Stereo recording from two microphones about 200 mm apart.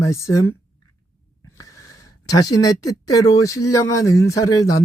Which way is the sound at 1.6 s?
15° left (ahead or behind).